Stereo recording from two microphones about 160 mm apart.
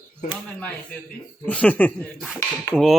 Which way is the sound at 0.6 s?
10° left (ahead or behind).